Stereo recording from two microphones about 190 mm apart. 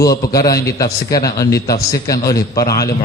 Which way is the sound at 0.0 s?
20° left (ahead or behind).